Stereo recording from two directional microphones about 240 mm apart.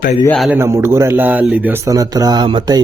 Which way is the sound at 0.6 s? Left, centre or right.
Centre.